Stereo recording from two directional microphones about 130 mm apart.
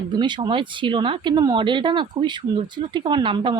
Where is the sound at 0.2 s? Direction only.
35° right (ahead or behind).